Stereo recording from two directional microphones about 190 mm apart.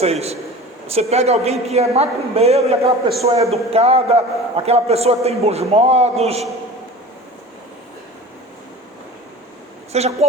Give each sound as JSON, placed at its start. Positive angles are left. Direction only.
{"t": 0.0, "sound": "a man's voice", "side_deg": -35}
{"t": 9.9, "sound": "a man's voice", "side_deg": -35}